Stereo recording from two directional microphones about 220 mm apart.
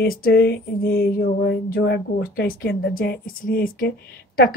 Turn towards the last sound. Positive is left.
turn(degrees=45)  # may be behind; listen again after turning